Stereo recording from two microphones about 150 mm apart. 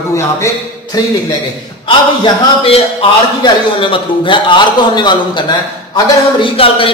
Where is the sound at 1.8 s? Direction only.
35° left (ahead or behind).